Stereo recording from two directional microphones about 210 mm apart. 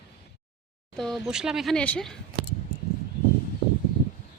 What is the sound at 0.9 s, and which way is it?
Speech, centre (ahead or behind).